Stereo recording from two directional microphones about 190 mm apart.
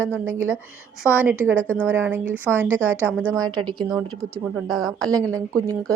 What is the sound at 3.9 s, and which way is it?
A woman's voice, centre (ahead or behind).